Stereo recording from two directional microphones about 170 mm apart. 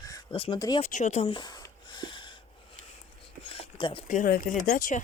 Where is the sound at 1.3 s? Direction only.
25° left (ahead or behind).